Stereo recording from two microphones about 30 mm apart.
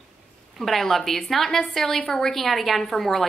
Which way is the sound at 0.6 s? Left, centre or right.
Centre.